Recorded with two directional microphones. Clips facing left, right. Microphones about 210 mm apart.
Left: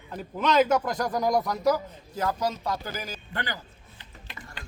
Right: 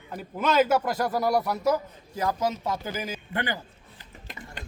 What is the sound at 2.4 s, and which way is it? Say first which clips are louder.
Speech: right 1 dB; 20° right (ahead or behind).